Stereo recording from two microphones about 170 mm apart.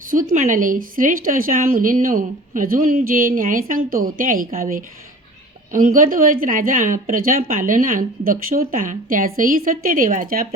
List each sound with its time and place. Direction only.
0.1 s speech: 55° right (ahead or behind)